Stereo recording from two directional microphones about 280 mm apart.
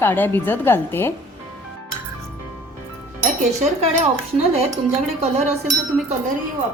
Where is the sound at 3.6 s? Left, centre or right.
Right.